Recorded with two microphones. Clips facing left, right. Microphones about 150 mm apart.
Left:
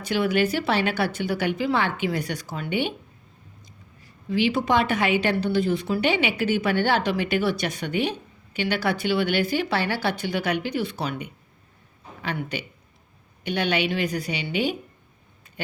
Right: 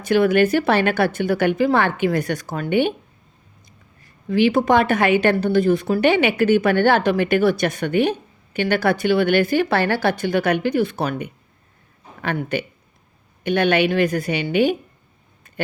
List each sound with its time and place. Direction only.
0.0 s a woman's voice: 55° right (ahead or behind)
4.3 s a woman's voice: 55° right (ahead or behind)